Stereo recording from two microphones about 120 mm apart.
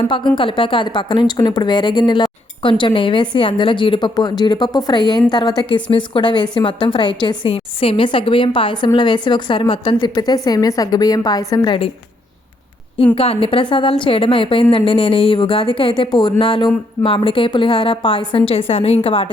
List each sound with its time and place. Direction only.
0.0 s speech: 45° left (ahead or behind)
7.5 s a woman's voice: 50° left (ahead or behind)
13.1 s a woman's voice: 50° left (ahead or behind)